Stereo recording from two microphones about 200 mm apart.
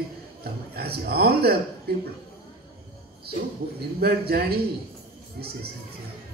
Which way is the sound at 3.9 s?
50° right (ahead or behind).